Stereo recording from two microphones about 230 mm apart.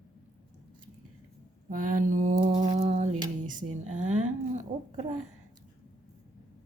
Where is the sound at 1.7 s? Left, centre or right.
Right.